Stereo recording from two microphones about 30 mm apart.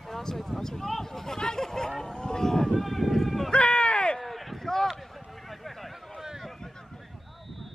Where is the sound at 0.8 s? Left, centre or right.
Centre.